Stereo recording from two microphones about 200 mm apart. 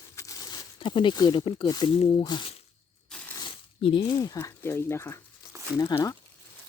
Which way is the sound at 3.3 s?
25° left (ahead or behind).